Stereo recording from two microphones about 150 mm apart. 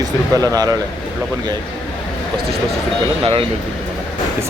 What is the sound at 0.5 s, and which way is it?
Speech, 25° right (ahead or behind).